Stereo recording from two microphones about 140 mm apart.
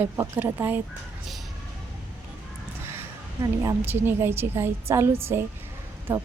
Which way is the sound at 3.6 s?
15° right (ahead or behind).